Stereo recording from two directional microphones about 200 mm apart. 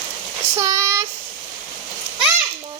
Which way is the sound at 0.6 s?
15° right (ahead or behind).